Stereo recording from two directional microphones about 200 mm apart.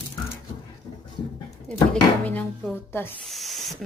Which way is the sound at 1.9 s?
10° left (ahead or behind).